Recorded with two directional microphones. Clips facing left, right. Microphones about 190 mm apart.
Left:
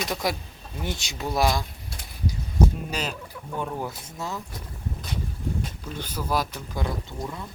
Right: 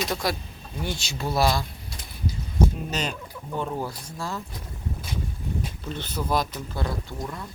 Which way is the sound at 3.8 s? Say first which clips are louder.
Even; 20° left (ahead or behind).